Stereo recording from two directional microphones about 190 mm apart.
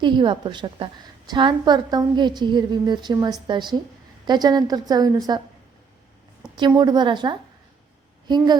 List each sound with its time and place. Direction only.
0.0 s a woman's voice: 25° right (ahead or behind)
6.6 s a woman's voice: 20° right (ahead or behind)